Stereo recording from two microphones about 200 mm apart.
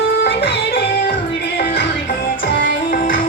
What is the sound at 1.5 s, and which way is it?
Music, 60° left (ahead or behind).